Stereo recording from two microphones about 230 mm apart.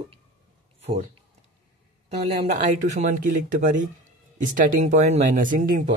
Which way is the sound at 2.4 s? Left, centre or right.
Right.